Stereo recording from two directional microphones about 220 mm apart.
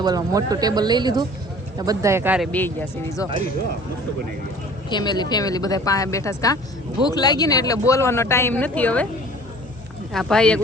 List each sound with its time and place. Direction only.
0.0 s speech: 15° right (ahead or behind)
2.5 s speech: 10° left (ahead or behind)
4.9 s speech: 20° left (ahead or behind)
10.1 s speech: centre (ahead or behind)